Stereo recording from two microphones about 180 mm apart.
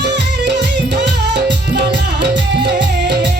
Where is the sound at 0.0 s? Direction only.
75° right (ahead or behind).